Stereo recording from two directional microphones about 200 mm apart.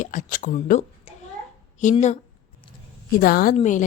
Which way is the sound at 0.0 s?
40° left (ahead or behind).